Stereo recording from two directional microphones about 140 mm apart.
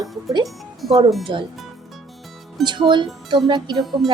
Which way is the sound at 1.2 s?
35° right (ahead or behind).